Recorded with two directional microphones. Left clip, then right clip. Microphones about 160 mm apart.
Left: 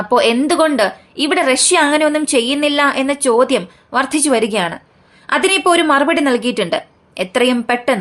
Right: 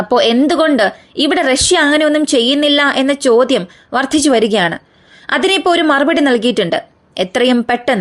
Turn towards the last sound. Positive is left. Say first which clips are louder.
# right 2 dB
turn(degrees=-35)  # may be behind; listen again after turning